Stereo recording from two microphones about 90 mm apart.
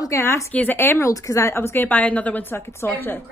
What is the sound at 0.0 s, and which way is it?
Speech, 30° left (ahead or behind).